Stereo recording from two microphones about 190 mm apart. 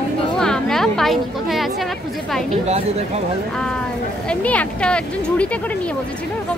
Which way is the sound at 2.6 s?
35° right (ahead or behind).